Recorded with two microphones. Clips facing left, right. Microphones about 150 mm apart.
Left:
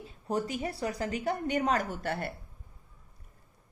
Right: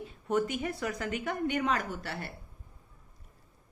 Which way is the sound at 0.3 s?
35° left (ahead or behind).